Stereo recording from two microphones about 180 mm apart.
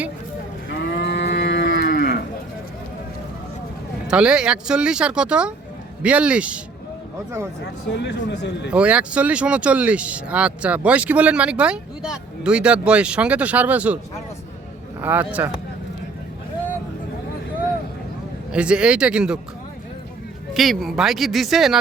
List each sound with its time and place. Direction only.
0.7 s cattle: 75° left (ahead or behind)
1.7 s cattle: 55° left (ahead or behind)
4.1 s speech: 5° right (ahead or behind)
7.6 s speech: 70° left (ahead or behind)
8.7 s speech: 5° right (ahead or behind)
15.0 s speech: 10° right (ahead or behind)
18.5 s speech: 5° right (ahead or behind)
20.5 s speech: centre (ahead or behind)